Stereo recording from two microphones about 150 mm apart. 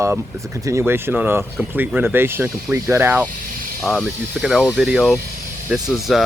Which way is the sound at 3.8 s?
5° left (ahead or behind).